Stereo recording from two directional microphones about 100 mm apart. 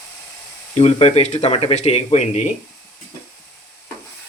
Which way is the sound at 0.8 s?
90° left.